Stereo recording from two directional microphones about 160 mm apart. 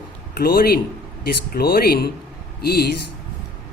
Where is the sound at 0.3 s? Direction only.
70° left (ahead or behind).